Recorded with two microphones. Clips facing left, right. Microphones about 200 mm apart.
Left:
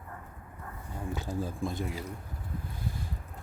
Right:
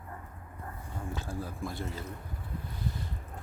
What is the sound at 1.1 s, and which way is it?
Speech, 20° left (ahead or behind).